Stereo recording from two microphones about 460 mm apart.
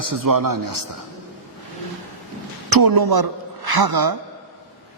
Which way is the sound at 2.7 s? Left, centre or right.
Right.